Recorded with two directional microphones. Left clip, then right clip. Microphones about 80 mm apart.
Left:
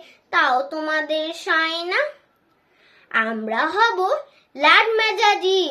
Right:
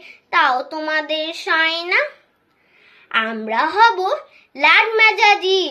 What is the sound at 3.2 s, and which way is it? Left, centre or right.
A woman's voice, left.